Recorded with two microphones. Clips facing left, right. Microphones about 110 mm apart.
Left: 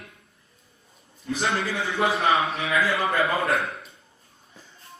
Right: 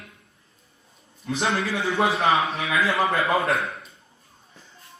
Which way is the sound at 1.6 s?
Centre (ahead or behind).